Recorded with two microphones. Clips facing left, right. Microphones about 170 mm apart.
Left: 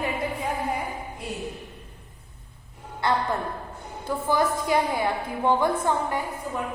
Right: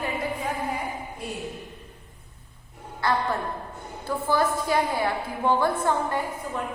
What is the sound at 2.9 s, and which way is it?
A woman's voice, 20° left (ahead or behind).